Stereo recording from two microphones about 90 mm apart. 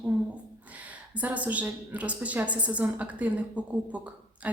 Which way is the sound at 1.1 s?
15° right (ahead or behind).